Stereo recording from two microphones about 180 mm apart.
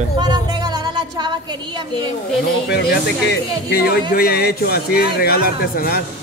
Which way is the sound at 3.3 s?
60° left (ahead or behind).